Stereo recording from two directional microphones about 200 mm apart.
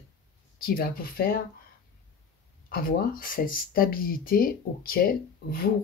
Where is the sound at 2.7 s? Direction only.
45° left (ahead or behind).